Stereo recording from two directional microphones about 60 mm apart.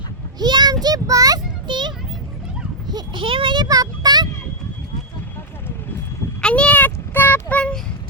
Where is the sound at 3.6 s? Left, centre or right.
Right.